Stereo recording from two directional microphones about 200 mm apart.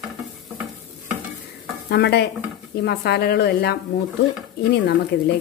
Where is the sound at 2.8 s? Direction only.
55° left (ahead or behind).